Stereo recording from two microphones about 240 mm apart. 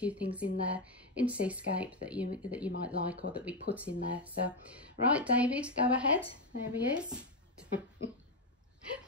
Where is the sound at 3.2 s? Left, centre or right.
Left.